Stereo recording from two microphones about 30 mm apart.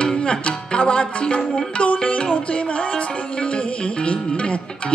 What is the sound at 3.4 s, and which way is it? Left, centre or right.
Music, left.